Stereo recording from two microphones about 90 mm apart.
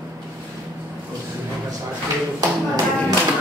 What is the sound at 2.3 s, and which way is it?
Tap, 40° right (ahead or behind).